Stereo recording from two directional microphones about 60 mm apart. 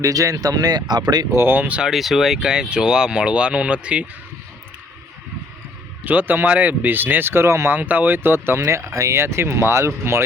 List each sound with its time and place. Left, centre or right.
0.0 s speech: right
1.4 s speech: right
1.6 s speech: right
1.9 s speech: centre
6.1 s speech: right
7.7 s speech: right
8.6 s speech: right
9.1 s speech: right